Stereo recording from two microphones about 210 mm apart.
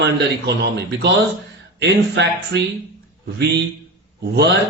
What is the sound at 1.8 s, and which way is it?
Speech, 55° right (ahead or behind).